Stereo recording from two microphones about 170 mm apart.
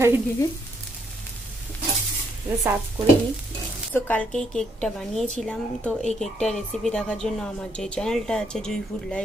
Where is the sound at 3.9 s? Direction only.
10° left (ahead or behind).